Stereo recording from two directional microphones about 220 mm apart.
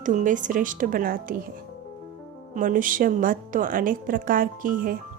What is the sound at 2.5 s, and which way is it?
A woman's voice, 35° right (ahead or behind).